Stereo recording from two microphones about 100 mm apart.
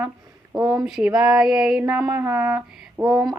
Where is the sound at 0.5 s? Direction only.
40° right (ahead or behind).